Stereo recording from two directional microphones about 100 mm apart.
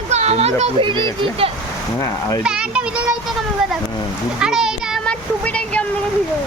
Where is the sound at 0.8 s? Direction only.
55° right (ahead or behind).